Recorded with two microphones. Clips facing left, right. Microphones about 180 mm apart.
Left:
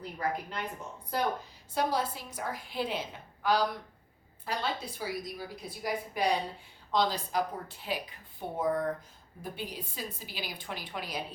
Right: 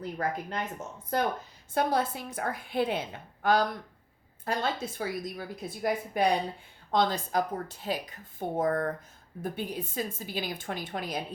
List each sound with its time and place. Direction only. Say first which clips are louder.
0.2 s a woman's voice: right 1 dB; 45° right (ahead or behind)
1.7 s a woman's voice: right 3 dB; 55° right (ahead or behind)
8.6 s a woman's voice: even; 55° right (ahead or behind)